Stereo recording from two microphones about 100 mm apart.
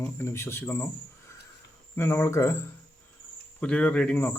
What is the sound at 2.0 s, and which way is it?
Speech, 25° left (ahead or behind).